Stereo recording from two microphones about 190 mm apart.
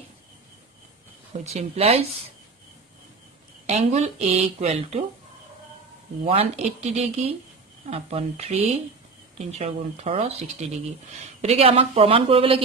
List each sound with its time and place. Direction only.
1.3 s speech: 35° right (ahead or behind)
3.6 s speech: 35° right (ahead or behind)
6.2 s speech: 30° right (ahead or behind)